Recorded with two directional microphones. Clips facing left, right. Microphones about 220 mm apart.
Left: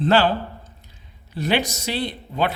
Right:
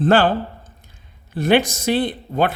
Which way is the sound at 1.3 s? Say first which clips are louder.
Right 6 dB; 50° right (ahead or behind).